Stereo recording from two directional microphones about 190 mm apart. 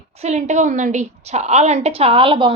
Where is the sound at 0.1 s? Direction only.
35° right (ahead or behind).